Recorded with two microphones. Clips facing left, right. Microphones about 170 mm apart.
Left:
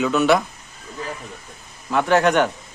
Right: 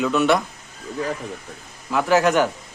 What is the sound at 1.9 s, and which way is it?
Speech, centre (ahead or behind).